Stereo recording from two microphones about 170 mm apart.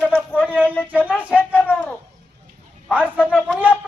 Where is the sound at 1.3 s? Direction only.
10° left (ahead or behind).